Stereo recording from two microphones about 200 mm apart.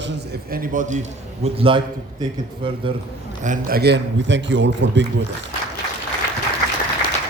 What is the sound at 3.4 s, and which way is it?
A man's voice, 45° right (ahead or behind).